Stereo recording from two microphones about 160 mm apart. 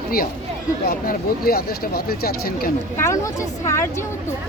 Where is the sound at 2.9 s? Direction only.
15° left (ahead or behind).